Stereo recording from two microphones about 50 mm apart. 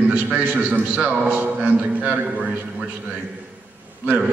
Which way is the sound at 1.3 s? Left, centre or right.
Right.